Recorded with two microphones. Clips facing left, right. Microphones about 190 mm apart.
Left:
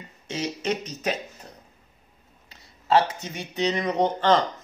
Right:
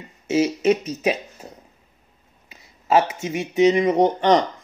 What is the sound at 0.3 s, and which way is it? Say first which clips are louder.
Speech: right 10 dB; 5° right (ahead or behind).